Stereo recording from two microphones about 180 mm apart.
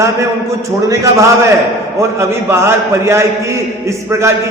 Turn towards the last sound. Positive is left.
turn(degrees=-15)  # may be behind; listen again after turning